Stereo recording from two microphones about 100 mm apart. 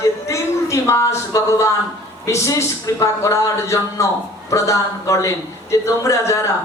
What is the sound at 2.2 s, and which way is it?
A man's voice, 30° left (ahead or behind).